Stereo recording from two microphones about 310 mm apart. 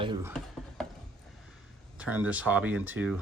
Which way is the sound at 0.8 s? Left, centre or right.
Centre.